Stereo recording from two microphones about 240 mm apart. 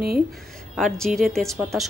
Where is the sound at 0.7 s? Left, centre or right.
Centre.